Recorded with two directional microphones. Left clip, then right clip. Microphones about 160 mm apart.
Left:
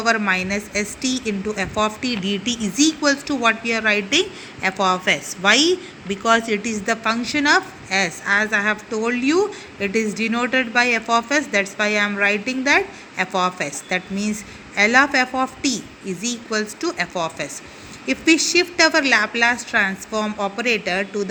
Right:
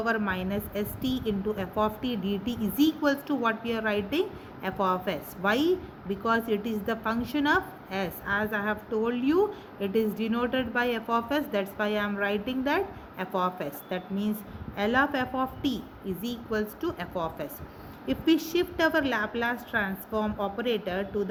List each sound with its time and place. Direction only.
0.0 s speech: 15° left (ahead or behind)